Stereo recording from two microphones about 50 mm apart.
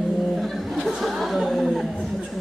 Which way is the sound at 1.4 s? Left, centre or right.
Centre.